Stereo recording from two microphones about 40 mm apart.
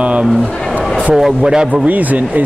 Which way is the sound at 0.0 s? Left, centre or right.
Right.